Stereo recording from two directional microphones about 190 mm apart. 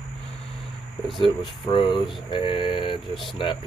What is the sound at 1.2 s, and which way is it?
Speech, 25° left (ahead or behind).